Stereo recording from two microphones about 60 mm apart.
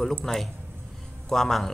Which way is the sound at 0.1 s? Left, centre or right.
Centre.